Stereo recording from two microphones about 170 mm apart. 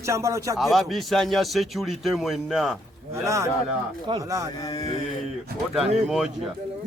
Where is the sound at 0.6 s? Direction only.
Centre (ahead or behind).